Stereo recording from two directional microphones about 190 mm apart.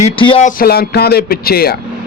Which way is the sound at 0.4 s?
50° left (ahead or behind).